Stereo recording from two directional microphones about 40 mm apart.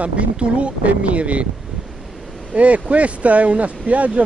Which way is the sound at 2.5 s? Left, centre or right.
Right.